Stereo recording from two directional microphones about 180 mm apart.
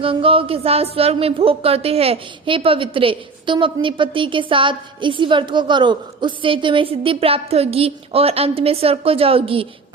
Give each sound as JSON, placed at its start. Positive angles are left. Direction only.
{"t": 0.0, "sound": "speech", "side_deg": -30}